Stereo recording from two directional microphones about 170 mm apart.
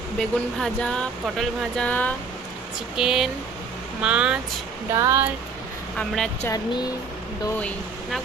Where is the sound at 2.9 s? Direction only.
Centre (ahead or behind).